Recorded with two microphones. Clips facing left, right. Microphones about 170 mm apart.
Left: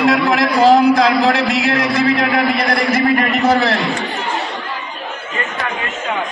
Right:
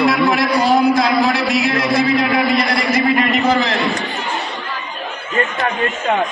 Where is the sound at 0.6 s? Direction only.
85° left; by 3.7 s 55° left (ahead or behind).